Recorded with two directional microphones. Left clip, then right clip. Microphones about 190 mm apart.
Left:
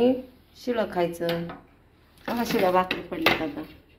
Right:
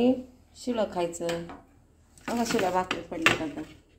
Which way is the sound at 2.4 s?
10° right (ahead or behind).